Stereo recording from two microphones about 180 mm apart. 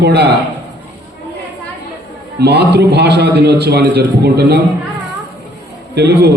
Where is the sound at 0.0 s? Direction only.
65° right (ahead or behind).